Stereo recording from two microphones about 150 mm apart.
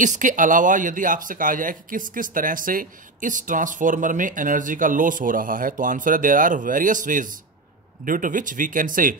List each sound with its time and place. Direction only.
0.0 s speech: 55° right (ahead or behind)